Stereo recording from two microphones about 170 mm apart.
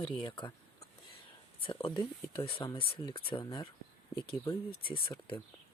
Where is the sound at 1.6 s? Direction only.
30° left (ahead or behind).